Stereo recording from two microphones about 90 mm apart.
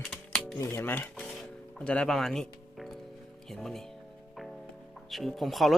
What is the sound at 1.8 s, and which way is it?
Speech, 10° left (ahead or behind).